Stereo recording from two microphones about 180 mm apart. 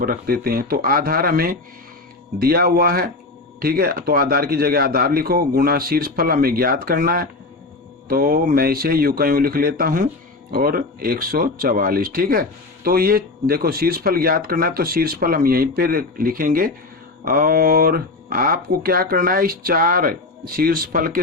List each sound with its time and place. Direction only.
0.0 s speech: 55° right (ahead or behind)